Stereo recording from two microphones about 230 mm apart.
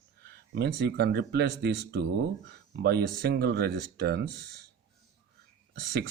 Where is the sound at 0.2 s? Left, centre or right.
Right.